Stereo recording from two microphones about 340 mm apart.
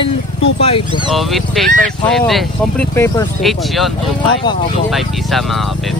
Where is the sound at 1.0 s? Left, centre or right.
Centre.